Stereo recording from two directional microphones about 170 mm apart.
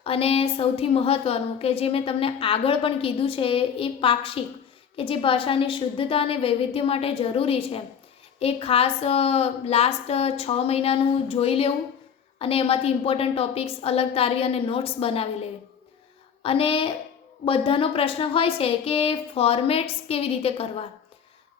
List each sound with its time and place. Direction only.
0.0 s a woman's voice: 35° left (ahead or behind)
16.4 s a woman's voice: 35° left (ahead or behind)